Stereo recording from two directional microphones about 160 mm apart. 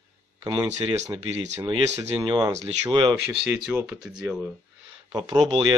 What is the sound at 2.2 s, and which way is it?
Speech, 30° right (ahead or behind).